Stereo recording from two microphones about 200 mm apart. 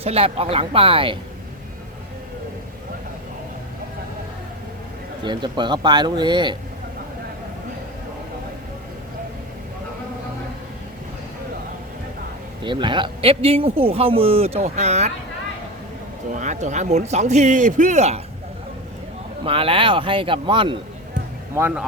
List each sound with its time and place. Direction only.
0.0 s speech: 30° right (ahead or behind)
5.2 s speech: 25° right (ahead or behind)
12.6 s speech: 25° right (ahead or behind)
16.3 s a man's voice: 35° right (ahead or behind)
19.5 s speech: 25° right (ahead or behind)
21.5 s speech: 10° right (ahead or behind)